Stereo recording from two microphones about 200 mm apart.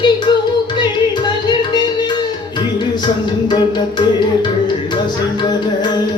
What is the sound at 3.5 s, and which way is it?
Music, 20° left (ahead or behind).